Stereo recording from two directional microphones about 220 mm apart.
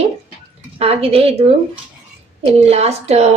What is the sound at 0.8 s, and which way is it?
A woman's voice, 25° right (ahead or behind).